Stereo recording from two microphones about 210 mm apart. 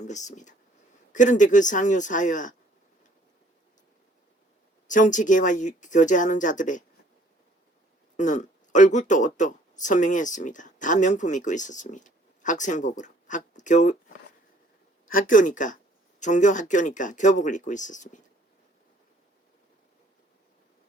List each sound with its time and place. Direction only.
0.0 s speech: 35° left (ahead or behind)
4.9 s speech: 35° left (ahead or behind)
8.1 s speech: 35° left (ahead or behind)
15.0 s speech: 40° left (ahead or behind)